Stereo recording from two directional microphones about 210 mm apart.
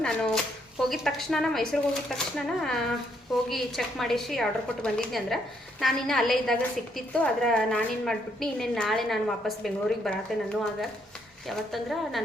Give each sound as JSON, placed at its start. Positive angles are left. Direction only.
{"t": 0.0, "sound": "a woman's voice", "side_deg": 5}